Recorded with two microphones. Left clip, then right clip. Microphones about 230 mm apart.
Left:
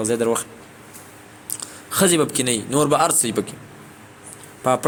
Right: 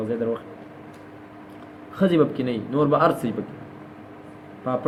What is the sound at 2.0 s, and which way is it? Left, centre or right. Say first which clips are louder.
Speech: left 2 dB; left.